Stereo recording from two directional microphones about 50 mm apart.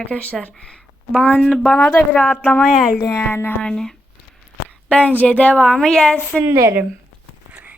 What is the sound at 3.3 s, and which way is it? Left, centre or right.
Speech, left.